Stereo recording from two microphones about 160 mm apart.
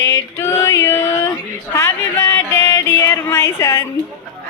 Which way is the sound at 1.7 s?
15° left (ahead or behind).